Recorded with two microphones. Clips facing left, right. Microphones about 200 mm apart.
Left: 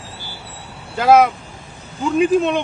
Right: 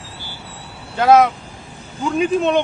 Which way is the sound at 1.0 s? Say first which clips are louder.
Even; centre (ahead or behind).